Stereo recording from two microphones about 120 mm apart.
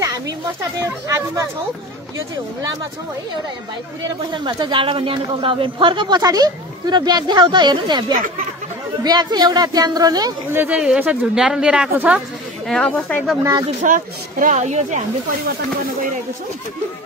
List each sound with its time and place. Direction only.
1.0 s speech: 30° right (ahead or behind)
4.3 s speech: 40° right (ahead or behind)
9.0 s speech: 35° right (ahead or behind)
10.5 s a woman's voice: 15° right (ahead or behind)
12.6 s speech: 5° left (ahead or behind)
13.4 s speech: 35° right (ahead or behind)
13.8 s speech: 90° right